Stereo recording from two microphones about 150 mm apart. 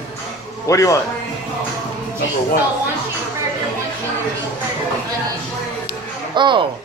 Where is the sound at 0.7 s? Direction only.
20° left (ahead or behind).